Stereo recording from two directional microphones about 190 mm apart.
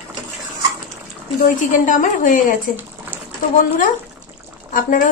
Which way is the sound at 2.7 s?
10° right (ahead or behind).